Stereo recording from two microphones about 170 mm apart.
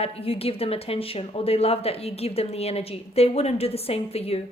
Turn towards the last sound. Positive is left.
turn(degrees=35)  # may be behind; listen again after turning